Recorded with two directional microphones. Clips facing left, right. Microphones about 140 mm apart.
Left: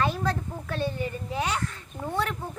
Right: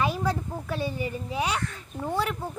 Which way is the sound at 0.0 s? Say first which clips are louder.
Even; 10° right (ahead or behind).